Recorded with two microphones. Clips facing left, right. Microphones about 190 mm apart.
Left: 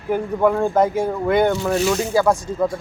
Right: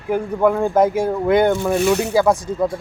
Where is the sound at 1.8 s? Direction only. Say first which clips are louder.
Right 3 dB; 65° right (ahead or behind).